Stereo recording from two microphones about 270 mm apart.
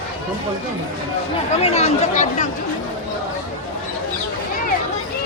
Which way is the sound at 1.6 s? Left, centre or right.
Left.